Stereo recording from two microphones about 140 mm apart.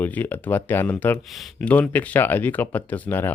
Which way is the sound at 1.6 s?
10° left (ahead or behind).